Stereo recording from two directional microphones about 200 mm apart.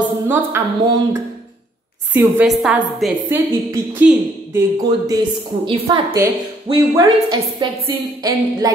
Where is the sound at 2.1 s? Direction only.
10° right (ahead or behind).